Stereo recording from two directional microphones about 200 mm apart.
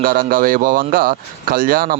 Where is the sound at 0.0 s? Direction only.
45° right (ahead or behind).